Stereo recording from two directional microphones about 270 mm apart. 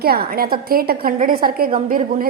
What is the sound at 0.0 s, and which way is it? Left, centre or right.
A woman's voice, right.